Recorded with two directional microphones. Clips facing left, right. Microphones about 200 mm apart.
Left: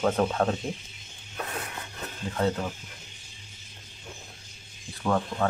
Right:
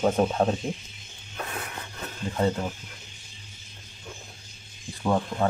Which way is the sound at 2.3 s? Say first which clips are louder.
Right 1 dB; 10° right (ahead or behind).